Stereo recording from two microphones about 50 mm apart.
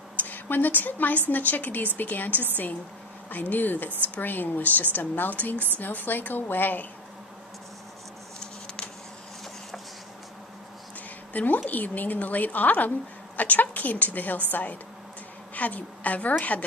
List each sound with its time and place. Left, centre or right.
0.2 s a woman's voice: left
8.4 s a sound: centre
11.3 s a woman's voice: left